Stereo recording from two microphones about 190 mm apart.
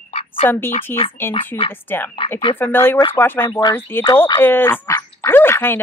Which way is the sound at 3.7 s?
10° left (ahead or behind).